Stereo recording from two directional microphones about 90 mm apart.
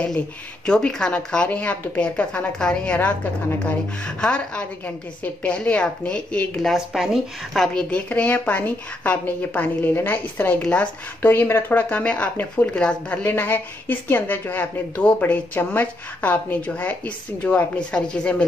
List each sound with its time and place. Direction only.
0.7 s a woman's voice: 10° left (ahead or behind)
7.9 s a woman's voice: 15° left (ahead or behind)